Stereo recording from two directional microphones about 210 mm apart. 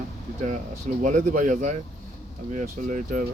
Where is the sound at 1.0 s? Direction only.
35° right (ahead or behind).